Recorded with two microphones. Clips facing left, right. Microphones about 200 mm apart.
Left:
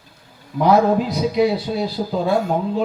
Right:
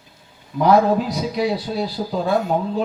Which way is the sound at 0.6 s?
Centre (ahead or behind).